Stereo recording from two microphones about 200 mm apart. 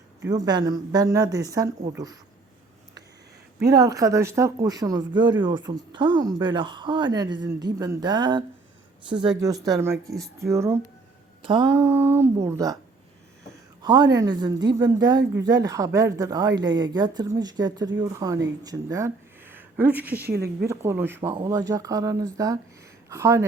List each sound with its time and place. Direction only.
0.3 s speech: 20° right (ahead or behind)
3.7 s speech: 15° right (ahead or behind)
11.4 s speech: 25° right (ahead or behind)
11.7 s speech: 10° right (ahead or behind)
13.8 s speech: 20° right (ahead or behind)
20.3 s a woman's voice: 50° right (ahead or behind)
20.7 s speech: 10° right (ahead or behind)